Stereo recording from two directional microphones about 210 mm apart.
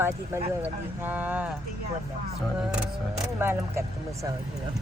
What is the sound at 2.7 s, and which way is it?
Speech, 10° right (ahead or behind).